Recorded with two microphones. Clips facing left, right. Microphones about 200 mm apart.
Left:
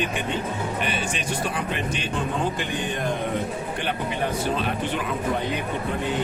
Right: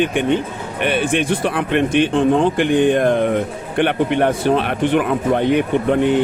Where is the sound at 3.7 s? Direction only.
65° right (ahead or behind).